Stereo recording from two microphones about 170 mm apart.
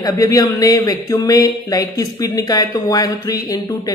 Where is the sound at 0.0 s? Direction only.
20° left (ahead or behind).